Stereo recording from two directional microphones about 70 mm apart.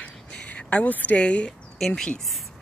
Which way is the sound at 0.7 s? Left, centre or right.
Left.